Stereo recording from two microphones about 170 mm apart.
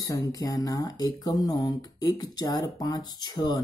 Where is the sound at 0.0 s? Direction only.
20° left (ahead or behind).